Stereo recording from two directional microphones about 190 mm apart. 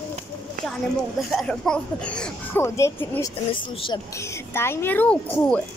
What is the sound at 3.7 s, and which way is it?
Speech, 25° left (ahead or behind).